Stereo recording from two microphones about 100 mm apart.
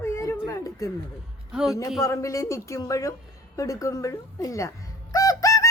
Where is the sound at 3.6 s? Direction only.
35° left (ahead or behind).